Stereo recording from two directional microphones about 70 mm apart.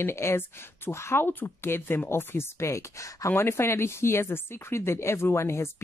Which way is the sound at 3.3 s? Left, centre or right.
Left.